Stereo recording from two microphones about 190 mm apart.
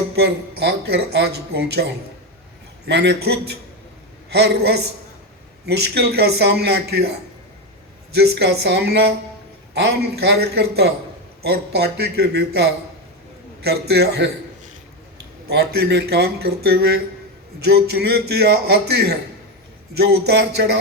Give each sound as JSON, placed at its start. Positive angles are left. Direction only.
{"t": 0.2, "sound": "speech", "side_deg": -60}
{"t": 8.1, "sound": "speech", "side_deg": -60}
{"t": 15.4, "sound": "speech", "side_deg": -60}